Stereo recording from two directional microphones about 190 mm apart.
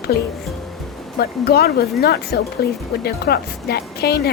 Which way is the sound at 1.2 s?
55° left (ahead or behind).